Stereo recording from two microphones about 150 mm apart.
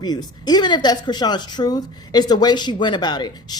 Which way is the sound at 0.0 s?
30° left (ahead or behind).